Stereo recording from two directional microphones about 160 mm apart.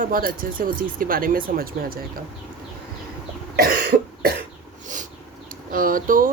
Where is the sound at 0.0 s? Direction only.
60° right (ahead or behind).